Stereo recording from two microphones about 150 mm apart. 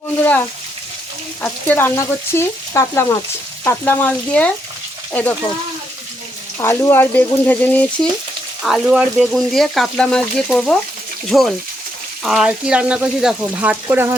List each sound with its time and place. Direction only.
0.2 s frying: 15° left (ahead or behind)
6.6 s frying: 15° left (ahead or behind)
8.6 s speech: 5° right (ahead or behind)